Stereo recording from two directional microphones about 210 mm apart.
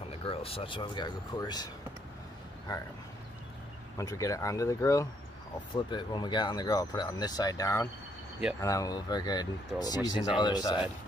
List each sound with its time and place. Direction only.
0.2 s speech: 25° left (ahead or behind)
2.7 s speech: 15° left (ahead or behind)
4.0 s speech: 15° left (ahead or behind)